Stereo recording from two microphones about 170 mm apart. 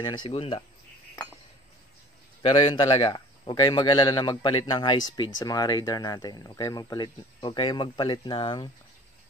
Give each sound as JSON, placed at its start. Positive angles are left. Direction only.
{"t": 0.0, "sound": "speech", "side_deg": 30}
{"t": 2.4, "sound": "speech", "side_deg": 30}